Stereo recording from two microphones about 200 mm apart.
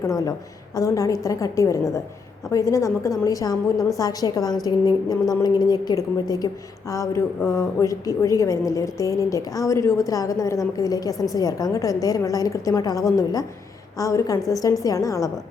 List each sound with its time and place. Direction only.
0.0 s a woman's voice: 15° left (ahead or behind)